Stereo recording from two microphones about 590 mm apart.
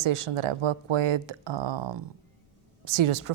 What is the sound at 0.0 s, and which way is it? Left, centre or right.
Speech, right.